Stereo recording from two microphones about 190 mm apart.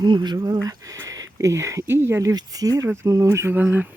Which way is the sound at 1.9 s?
10° right (ahead or behind).